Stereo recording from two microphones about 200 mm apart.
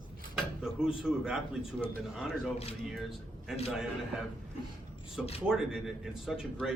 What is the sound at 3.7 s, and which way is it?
Speech, centre (ahead or behind).